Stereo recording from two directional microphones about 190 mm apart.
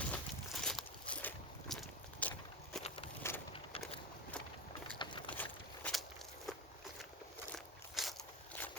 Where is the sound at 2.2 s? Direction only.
5° left (ahead or behind).